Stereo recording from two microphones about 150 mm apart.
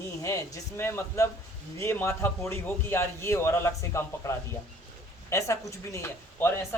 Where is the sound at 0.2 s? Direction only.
20° left (ahead or behind).